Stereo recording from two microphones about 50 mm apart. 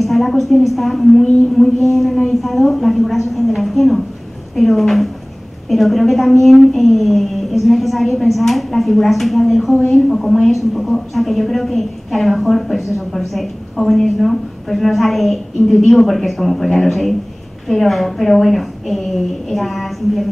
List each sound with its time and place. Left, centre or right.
0.0 s a woman's voice: centre